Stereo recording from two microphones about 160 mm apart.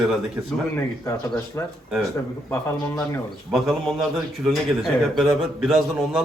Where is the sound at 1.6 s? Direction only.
20° left (ahead or behind).